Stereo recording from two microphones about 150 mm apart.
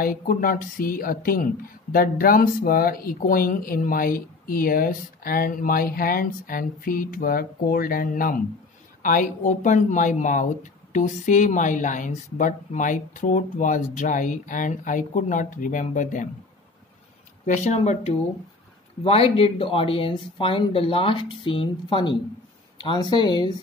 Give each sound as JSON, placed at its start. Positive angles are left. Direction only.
{"t": 0.0, "sound": "speech", "side_deg": 70}
{"t": 17.5, "sound": "speech", "side_deg": 50}